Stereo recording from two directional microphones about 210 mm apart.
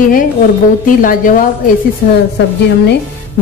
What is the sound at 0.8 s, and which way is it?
Speech, 40° left (ahead or behind).